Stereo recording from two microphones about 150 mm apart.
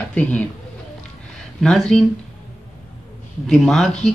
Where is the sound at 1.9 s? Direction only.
Centre (ahead or behind).